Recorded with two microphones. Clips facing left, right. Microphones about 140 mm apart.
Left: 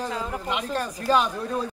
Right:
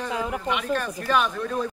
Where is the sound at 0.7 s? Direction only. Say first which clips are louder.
Left 5 dB; 35° left (ahead or behind).